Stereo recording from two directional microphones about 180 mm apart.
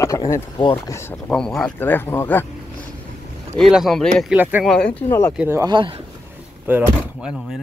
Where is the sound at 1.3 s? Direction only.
5° left (ahead or behind).